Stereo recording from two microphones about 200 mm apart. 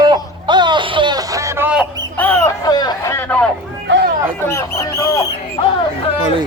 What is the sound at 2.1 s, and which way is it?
Speech, 10° left (ahead or behind).